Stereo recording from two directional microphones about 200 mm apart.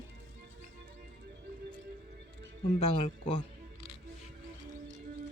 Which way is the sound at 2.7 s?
30° left (ahead or behind).